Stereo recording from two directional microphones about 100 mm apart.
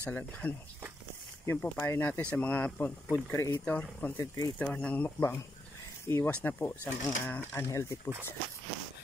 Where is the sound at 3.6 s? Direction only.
15° left (ahead or behind).